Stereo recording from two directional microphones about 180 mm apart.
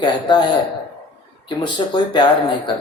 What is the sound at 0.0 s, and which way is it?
A man's voice, 25° left (ahead or behind).